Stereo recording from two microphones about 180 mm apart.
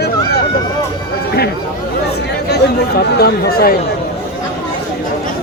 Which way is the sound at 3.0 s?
60° left (ahead or behind).